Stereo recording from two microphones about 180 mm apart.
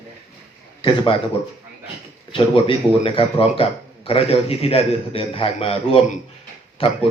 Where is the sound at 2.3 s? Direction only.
30° left (ahead or behind).